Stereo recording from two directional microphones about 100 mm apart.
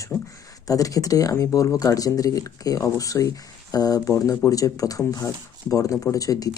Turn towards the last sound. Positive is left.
turn(degrees=35)  # may be behind; listen again after turning